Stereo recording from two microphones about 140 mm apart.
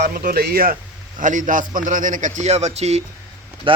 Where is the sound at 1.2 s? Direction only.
65° right (ahead or behind); by 3.0 s 50° right (ahead or behind).